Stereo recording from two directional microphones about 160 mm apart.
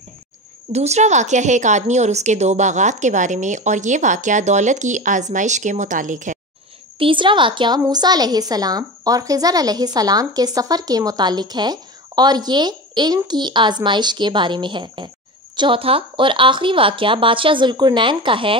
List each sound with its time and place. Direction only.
0.7 s a woman's voice: 45° right (ahead or behind)
7.0 s a woman's voice: 30° right (ahead or behind)